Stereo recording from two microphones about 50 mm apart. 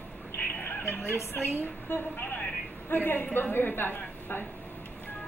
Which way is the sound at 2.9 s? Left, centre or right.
Left.